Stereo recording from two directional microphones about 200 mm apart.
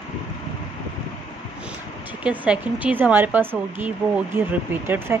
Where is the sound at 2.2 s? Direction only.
5° right (ahead or behind).